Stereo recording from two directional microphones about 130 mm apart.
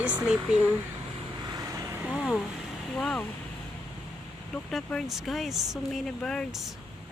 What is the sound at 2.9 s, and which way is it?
Speech, 5° left (ahead or behind).